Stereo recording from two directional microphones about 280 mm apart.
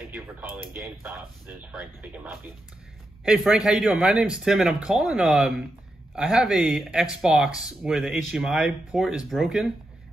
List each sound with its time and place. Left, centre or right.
1.7 s speech: centre